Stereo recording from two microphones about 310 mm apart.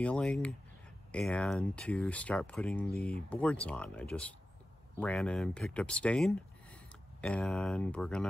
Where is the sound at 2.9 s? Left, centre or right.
Centre.